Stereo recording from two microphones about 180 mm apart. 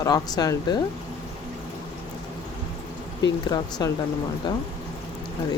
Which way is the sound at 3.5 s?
20° left (ahead or behind).